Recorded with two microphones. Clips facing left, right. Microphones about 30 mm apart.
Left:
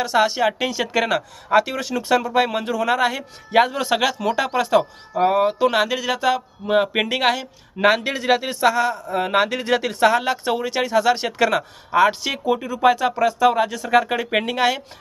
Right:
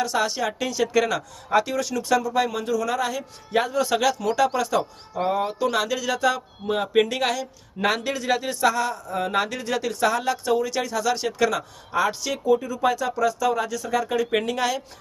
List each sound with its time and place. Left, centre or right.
0.0 s speech: left